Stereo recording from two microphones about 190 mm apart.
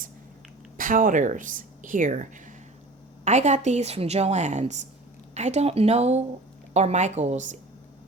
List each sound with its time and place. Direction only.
0.8 s speech: 45° right (ahead or behind)
3.2 s a woman's voice: 40° right (ahead or behind)